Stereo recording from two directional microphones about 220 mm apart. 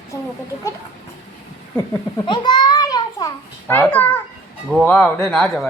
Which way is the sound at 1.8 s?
20° left (ahead or behind).